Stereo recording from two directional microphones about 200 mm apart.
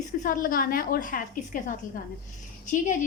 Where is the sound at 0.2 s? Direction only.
40° left (ahead or behind).